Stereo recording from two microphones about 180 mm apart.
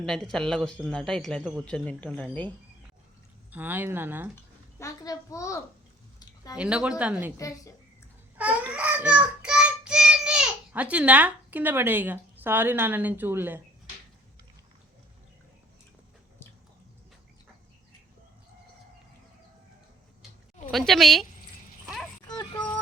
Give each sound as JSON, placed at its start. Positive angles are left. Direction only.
{"t": 0.0, "sound": "speech", "side_deg": 5}
{"t": 3.5, "sound": "speech", "side_deg": -10}
{"t": 4.8, "sound": "a child's voice", "side_deg": 15}
{"t": 6.1, "sound": "a sound", "side_deg": 20}
{"t": 6.6, "sound": "speech", "side_deg": -5}
{"t": 7.3, "sound": "a child's voice", "side_deg": 20}
{"t": 8.4, "sound": "a child's voice", "side_deg": -10}
{"t": 20.7, "sound": "speech", "side_deg": 0}
{"t": 22.3, "sound": "music", "side_deg": 20}